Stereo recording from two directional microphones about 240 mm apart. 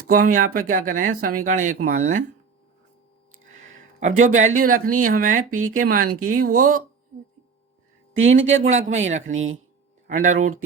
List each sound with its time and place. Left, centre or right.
0.1 s speech: right
3.8 s a sound: right
4.5 s speech: right
8.2 s speech: right
9.3 s speech: right
10.1 s speech: right